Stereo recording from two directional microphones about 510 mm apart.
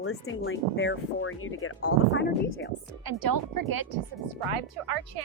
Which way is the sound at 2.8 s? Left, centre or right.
Right.